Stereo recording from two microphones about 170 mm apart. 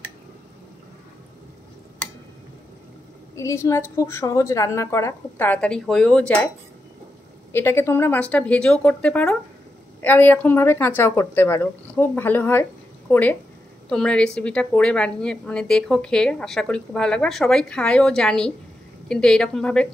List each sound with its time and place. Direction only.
3.3 s a woman's voice: 15° left (ahead or behind)
7.5 s a woman's voice: 15° left (ahead or behind)